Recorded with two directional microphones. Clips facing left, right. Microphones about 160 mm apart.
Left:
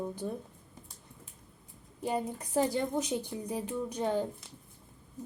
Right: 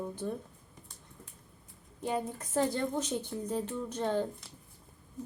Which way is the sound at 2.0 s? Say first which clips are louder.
Left 1 dB; 10° left (ahead or behind).